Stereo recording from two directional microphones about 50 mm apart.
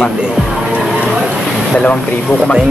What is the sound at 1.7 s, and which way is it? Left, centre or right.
Speech, left.